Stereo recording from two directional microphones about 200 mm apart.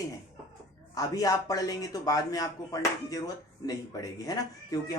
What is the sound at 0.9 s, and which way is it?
Speech, 15° left (ahead or behind).